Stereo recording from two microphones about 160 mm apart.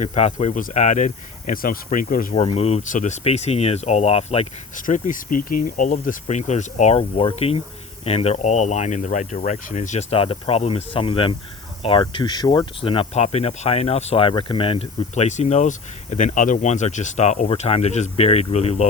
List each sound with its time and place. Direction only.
0.0 s speech: 45° left (ahead or behind)
2.3 s speech: 40° left (ahead or behind)